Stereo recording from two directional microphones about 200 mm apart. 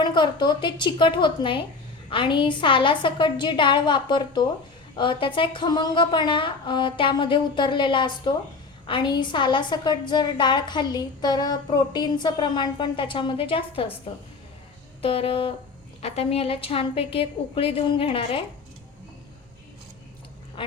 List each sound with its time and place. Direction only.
0.0 s a woman's voice: 20° left (ahead or behind)
15.0 s a woman's voice: 30° left (ahead or behind)
20.6 s a woman's voice: 25° left (ahead or behind)